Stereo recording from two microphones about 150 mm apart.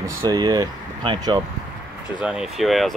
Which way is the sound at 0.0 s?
25° right (ahead or behind).